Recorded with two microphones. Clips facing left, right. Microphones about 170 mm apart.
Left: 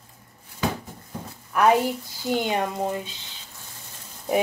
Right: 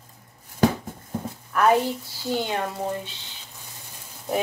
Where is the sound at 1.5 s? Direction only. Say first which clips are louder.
Left 1 dB; 15° left (ahead or behind).